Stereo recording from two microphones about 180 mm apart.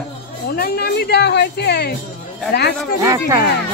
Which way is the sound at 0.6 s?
60° left (ahead or behind).